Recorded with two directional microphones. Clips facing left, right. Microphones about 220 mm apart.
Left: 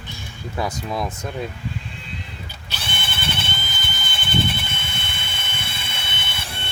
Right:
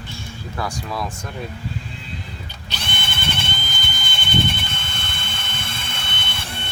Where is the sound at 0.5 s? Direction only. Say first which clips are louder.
Left 2 dB; 20° left (ahead or behind).